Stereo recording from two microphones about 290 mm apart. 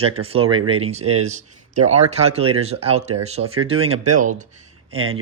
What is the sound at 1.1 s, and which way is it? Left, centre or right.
Speech, right.